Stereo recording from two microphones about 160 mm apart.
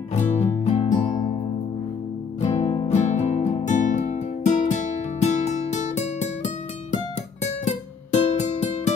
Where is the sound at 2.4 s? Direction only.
45° left (ahead or behind).